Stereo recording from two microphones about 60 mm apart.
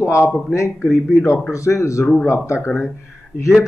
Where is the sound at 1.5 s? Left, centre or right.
Left.